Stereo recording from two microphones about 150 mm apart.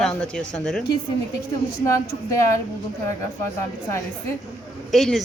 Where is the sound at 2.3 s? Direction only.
20° left (ahead or behind).